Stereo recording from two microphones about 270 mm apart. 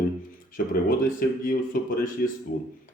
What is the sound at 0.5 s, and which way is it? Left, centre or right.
Speech, left.